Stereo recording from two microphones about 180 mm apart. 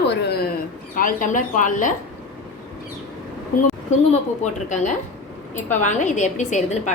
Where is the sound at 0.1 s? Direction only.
65° left (ahead or behind); by 1.9 s 45° left (ahead or behind).